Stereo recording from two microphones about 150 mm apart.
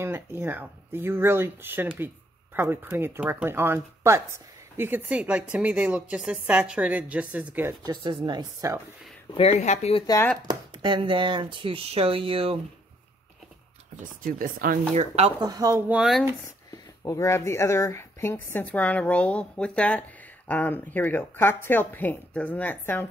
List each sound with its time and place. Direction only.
0.0 s speech: 15° right (ahead or behind)
7.8 s speech: 30° right (ahead or behind)
9.3 s speech: 45° left (ahead or behind)
10.4 s speech: 30° right (ahead or behind)
14.2 s speech: 70° right (ahead or behind)
15.0 s speech: 45° right (ahead or behind)
15.4 s speech: 25° right (ahead or behind)
15.9 s speech: 5° right (ahead or behind)
16.7 s speech: 20° left (ahead or behind)